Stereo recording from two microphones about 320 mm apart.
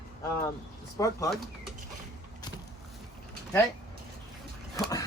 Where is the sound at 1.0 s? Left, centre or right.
Centre.